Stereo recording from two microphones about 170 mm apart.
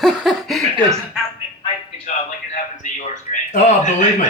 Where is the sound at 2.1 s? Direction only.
45° left (ahead or behind).